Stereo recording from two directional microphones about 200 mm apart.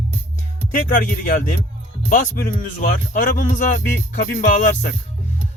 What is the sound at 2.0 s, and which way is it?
Speech, 45° left (ahead or behind).